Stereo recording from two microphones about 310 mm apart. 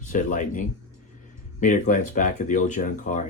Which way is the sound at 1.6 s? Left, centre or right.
Left.